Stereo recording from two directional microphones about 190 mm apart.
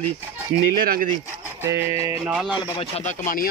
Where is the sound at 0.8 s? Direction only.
50° right (ahead or behind).